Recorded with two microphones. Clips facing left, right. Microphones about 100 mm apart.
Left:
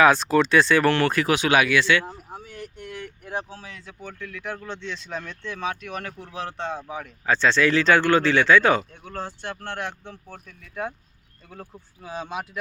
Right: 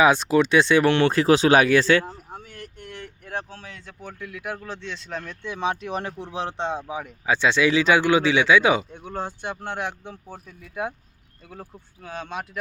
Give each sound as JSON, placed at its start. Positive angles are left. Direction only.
{"t": 0.0, "sound": "speech", "side_deg": -15}
{"t": 2.0, "sound": "a sound", "side_deg": 5}
{"t": 4.2, "sound": "speech", "side_deg": -10}
{"t": 5.4, "sound": "speech", "side_deg": -20}
{"t": 11.4, "sound": "speech", "side_deg": -5}